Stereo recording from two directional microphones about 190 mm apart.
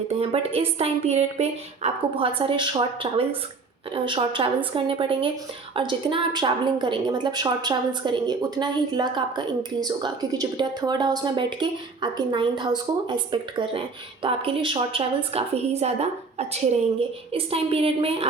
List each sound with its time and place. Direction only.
0.2 s a woman's voice: 30° right (ahead or behind)